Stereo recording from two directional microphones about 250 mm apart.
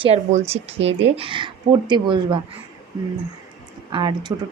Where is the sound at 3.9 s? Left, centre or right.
Centre.